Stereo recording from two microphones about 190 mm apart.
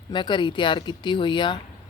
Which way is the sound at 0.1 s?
25° left (ahead or behind).